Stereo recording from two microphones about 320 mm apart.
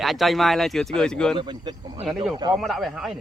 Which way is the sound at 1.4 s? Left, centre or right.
Centre.